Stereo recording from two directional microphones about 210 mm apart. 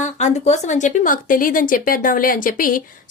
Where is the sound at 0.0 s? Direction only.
35° left (ahead or behind).